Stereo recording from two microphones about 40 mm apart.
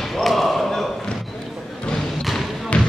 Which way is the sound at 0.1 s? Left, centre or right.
Centre.